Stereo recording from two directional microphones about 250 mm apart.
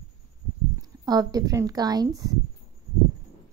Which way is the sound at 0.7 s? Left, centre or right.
Centre.